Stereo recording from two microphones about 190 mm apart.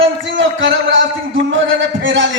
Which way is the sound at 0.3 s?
80° right.